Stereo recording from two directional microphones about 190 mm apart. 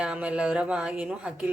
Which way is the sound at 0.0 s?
5° right (ahead or behind).